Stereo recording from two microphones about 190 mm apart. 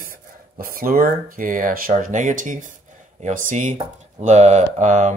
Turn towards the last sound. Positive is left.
turn(degrees=-40)  # may be behind; listen again after turning